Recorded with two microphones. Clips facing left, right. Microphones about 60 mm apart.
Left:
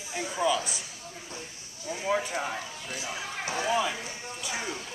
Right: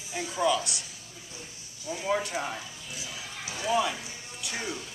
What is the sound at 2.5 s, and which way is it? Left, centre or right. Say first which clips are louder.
Speech: left 4 dB; left.